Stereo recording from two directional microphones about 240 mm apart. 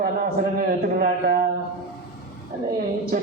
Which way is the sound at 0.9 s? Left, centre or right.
Right.